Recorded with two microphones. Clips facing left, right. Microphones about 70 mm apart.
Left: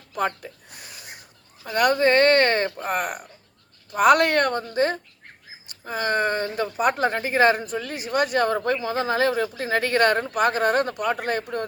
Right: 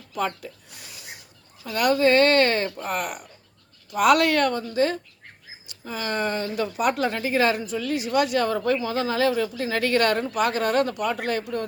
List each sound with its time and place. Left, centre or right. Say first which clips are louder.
0.1 s a woman's voice: left 2 dB; left